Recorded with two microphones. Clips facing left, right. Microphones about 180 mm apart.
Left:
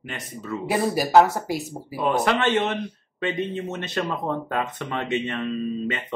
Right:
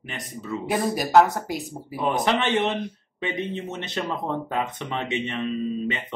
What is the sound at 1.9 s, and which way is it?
A man's voice, 15° right (ahead or behind).